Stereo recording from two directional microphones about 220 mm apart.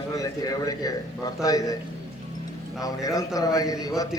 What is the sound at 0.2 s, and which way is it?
A man's voice, 15° left (ahead or behind).